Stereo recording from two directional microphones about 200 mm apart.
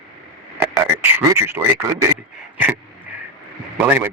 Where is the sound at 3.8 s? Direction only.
10° right (ahead or behind).